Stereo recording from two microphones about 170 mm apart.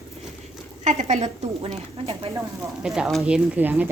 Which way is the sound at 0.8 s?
45° right (ahead or behind).